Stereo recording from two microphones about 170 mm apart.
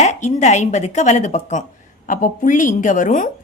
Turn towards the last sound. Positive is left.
turn(degrees=50)  # may be behind; listen again after turning